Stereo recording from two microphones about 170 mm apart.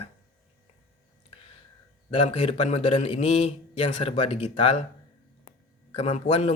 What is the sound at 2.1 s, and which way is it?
Speech, 30° left (ahead or behind).